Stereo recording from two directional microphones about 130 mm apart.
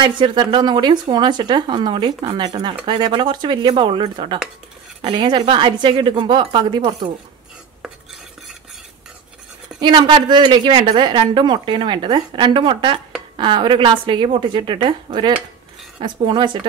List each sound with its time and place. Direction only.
0.0 s speech: 35° right (ahead or behind)
9.8 s speech: 35° right (ahead or behind)